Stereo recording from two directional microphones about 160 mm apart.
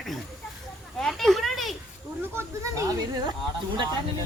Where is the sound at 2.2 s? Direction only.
15° right (ahead or behind).